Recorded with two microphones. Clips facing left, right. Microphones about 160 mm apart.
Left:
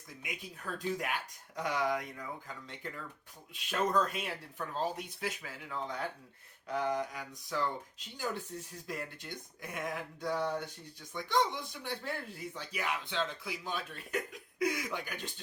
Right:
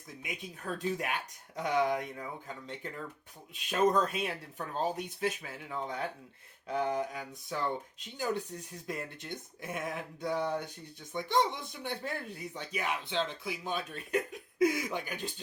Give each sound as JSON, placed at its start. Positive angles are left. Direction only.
{"t": 0.2, "sound": "speech", "side_deg": -20}
{"t": 3.5, "sound": "speech", "side_deg": -20}